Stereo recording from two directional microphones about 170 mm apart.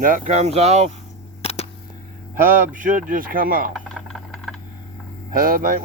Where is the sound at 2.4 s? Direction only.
55° right (ahead or behind).